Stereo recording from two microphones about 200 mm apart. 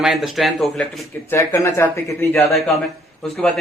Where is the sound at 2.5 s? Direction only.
Centre (ahead or behind).